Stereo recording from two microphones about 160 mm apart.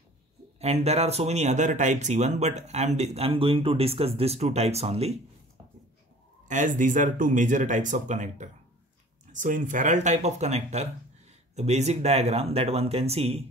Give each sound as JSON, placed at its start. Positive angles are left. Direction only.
{"t": 0.6, "sound": "speech", "side_deg": -40}
{"t": 6.4, "sound": "speech", "side_deg": -50}